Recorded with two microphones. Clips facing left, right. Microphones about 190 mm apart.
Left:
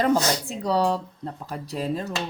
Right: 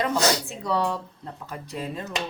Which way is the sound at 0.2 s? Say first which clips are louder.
Right 2 dB; 80° right.